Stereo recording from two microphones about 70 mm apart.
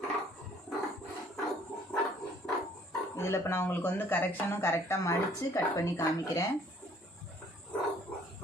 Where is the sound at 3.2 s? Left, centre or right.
Left.